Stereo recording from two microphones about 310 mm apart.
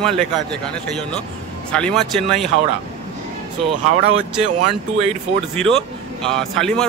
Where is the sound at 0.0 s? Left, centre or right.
Centre.